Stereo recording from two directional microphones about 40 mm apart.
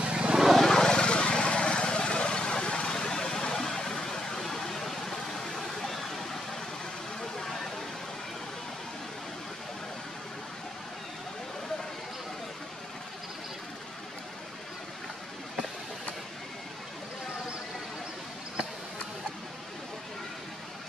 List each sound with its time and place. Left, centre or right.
0.0 s vehicle: right
0.6 s vehicle: centre
7.2 s music: centre